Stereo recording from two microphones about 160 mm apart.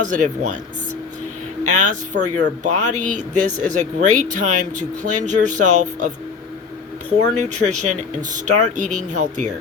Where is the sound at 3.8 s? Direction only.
50° right (ahead or behind).